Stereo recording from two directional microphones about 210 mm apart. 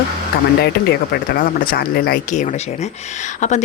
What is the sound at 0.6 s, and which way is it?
A woman's voice, 50° left (ahead or behind).